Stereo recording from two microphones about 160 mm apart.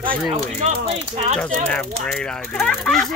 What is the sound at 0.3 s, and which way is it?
Speech, 45° right (ahead or behind).